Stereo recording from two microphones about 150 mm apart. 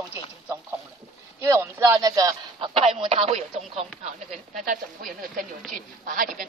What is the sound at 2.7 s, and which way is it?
Speech, 35° right (ahead or behind).